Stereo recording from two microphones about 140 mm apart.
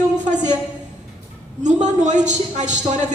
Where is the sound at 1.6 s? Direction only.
60° right (ahead or behind).